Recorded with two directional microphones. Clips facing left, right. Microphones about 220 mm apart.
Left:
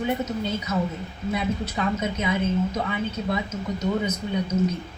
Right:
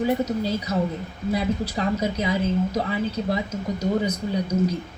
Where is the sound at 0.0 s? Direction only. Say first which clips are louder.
Right 3 dB; 35° right (ahead or behind).